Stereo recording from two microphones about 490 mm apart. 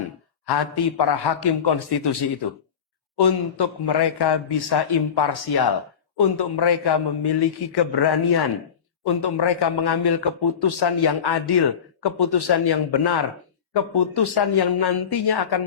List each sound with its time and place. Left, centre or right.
0.4 s a man's voice: left